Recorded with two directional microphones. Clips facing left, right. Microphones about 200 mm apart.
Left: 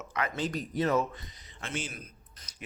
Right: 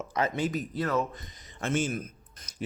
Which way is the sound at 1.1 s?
45° right (ahead or behind).